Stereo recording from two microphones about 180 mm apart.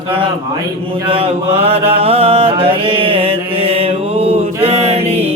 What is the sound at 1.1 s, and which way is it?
Mantra, 30° right (ahead or behind).